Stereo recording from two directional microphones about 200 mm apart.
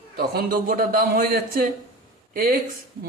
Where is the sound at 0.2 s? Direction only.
50° right (ahead or behind).